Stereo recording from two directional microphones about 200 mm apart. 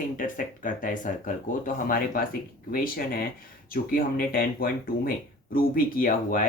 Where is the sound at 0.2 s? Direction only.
40° left (ahead or behind).